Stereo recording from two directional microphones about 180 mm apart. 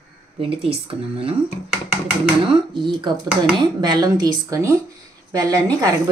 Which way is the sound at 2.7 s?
25° right (ahead or behind).